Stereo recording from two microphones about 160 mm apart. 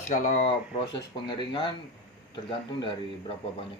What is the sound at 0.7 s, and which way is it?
Speech, 30° left (ahead or behind).